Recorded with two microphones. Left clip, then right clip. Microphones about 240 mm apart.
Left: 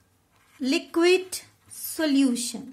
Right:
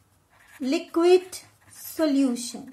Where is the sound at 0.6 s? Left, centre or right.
Left.